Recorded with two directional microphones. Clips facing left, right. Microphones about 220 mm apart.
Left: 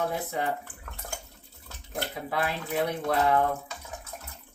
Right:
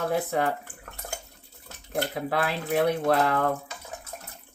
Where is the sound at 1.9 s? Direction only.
65° right (ahead or behind).